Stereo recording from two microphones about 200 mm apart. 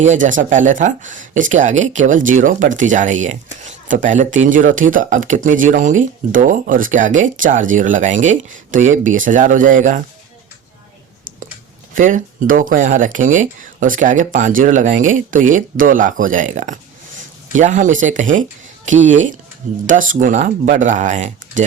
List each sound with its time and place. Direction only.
0.0 s speech: 40° right (ahead or behind)
11.9 s speech: 40° right (ahead or behind)